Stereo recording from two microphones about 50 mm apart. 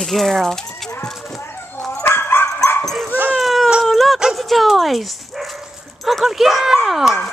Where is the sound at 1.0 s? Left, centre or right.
Centre.